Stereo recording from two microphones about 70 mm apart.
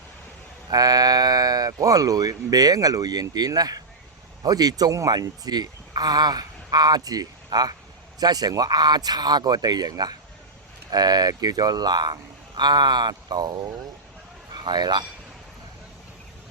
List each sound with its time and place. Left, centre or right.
0.7 s speech: right
9.9 s speech: right
10.9 s speech: right
14.5 s speech: right